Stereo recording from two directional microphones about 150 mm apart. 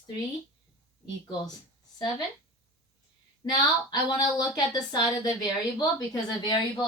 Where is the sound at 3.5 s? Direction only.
25° left (ahead or behind).